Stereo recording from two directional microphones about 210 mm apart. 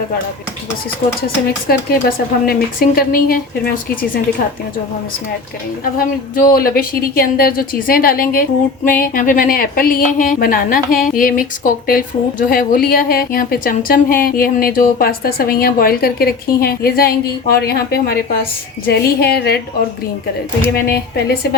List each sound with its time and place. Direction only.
1.6 s a woman's voice: 45° left (ahead or behind)
6.3 s a woman's voice: 45° left (ahead or behind)
20.7 s a woman's voice: 50° left (ahead or behind)